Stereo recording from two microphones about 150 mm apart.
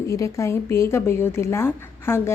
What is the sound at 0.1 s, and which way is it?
A woman's voice, 20° left (ahead or behind).